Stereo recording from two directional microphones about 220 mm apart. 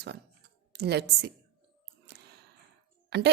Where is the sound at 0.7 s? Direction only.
50° right (ahead or behind).